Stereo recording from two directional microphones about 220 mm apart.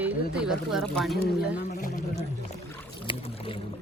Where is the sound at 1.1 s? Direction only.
45° left (ahead or behind).